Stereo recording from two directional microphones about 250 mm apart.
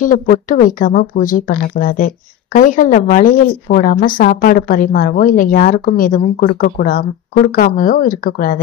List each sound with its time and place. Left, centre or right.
0.0 s speech: left